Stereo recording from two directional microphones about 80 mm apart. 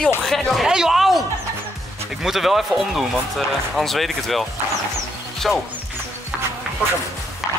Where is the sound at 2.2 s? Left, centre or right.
Centre.